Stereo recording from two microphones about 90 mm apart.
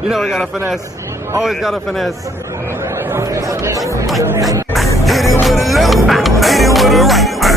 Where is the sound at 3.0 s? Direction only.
30° right (ahead or behind).